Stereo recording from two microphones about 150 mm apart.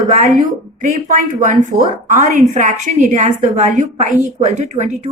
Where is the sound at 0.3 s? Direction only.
60° right (ahead or behind).